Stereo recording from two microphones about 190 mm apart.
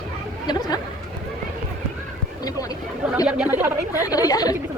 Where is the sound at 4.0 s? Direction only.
20° left (ahead or behind).